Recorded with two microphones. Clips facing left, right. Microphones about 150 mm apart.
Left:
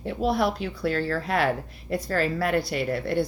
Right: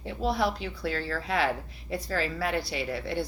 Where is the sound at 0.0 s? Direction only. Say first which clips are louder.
Left 4 dB; 55° left (ahead or behind).